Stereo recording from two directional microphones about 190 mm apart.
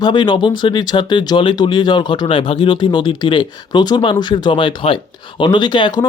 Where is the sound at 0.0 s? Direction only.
25° left (ahead or behind).